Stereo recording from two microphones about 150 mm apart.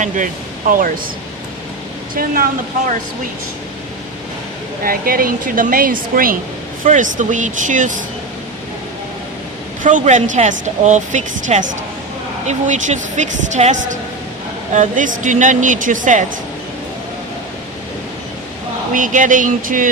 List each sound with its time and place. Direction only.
0.7 s speech: 65° right (ahead or behind)
2.1 s speech: 75° right (ahead or behind)
4.8 s speech: 70° right (ahead or behind)
6.8 s speech: 60° right (ahead or behind)
9.8 s speech: 55° right (ahead or behind)
18.9 s speech: 60° right (ahead or behind)